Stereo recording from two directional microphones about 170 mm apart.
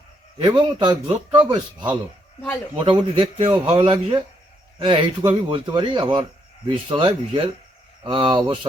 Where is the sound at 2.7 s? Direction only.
30° right (ahead or behind).